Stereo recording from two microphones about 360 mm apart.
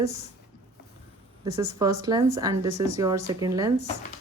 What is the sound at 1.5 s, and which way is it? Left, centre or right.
A woman's voice, centre.